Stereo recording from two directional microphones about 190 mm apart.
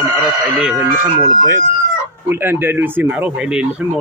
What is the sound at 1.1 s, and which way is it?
Speech, 25° right (ahead or behind).